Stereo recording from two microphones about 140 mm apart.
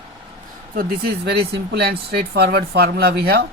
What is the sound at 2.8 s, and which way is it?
Speech, 90° right.